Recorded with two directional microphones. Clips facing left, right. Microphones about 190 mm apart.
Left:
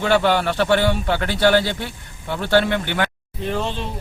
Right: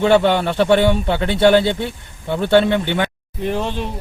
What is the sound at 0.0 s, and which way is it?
Speech, 25° right (ahead or behind).